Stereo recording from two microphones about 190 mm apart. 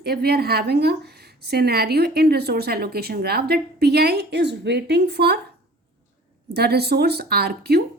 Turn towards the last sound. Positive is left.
turn(degrees=-55)  # may be behind; listen again after turning